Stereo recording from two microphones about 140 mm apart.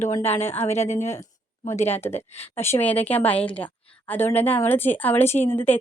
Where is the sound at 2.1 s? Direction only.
45° left (ahead or behind).